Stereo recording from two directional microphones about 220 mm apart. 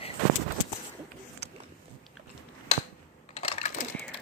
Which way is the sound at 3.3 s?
25° left (ahead or behind).